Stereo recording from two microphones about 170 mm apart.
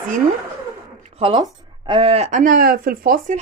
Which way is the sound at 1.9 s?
35° right (ahead or behind).